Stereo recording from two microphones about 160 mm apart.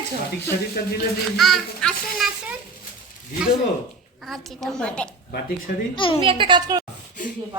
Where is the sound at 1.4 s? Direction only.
Centre (ahead or behind).